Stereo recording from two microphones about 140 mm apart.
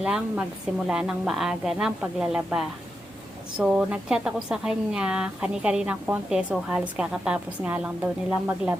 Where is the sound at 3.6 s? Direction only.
5° right (ahead or behind).